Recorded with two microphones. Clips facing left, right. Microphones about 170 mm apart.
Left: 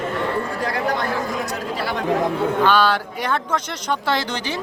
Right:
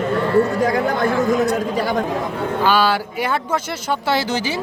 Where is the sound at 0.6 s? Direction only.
45° right (ahead or behind).